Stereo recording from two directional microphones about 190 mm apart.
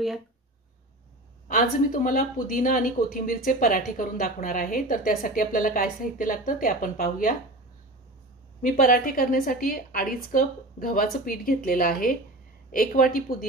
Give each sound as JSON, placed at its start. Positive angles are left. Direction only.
{"t": 1.5, "sound": "speech", "side_deg": 45}
{"t": 8.6, "sound": "speech", "side_deg": 45}